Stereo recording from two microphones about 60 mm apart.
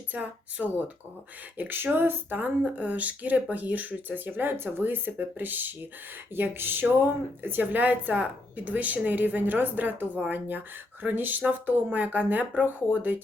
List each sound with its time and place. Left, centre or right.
0.1 s speech: right
2.6 s speech: right